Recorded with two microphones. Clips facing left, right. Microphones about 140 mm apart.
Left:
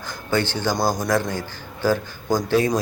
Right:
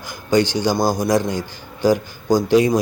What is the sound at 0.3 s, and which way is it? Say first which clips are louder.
A man's voice: right 5 dB; 15° right (ahead or behind).